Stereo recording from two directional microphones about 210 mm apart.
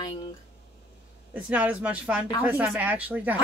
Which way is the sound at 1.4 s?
5° right (ahead or behind).